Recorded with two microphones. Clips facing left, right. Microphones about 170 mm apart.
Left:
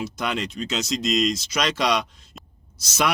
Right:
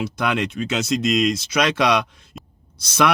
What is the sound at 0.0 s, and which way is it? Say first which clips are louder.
Speech: right 5 dB; 60° right (ahead or behind).